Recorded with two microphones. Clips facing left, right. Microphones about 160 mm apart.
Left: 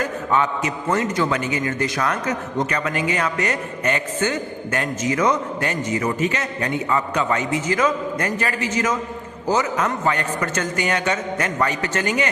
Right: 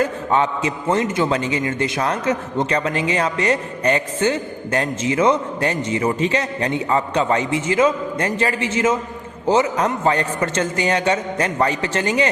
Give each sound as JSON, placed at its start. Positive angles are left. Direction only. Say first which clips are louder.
{"t": 0.0, "sound": "a man's voice", "louder": "right 2 dB", "side_deg": -30}